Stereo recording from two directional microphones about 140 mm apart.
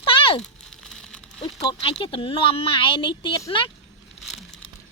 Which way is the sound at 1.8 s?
40° left (ahead or behind).